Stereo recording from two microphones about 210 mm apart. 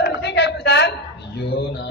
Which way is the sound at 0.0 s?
55° left (ahead or behind).